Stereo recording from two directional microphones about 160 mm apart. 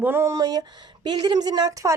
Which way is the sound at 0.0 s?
15° right (ahead or behind).